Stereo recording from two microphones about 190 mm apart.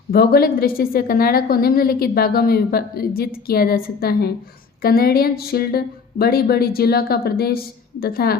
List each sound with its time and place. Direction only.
0.1 s a woman's voice: 55° left (ahead or behind)